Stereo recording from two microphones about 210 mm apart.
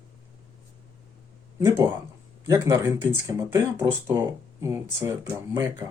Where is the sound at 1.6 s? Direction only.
15° right (ahead or behind).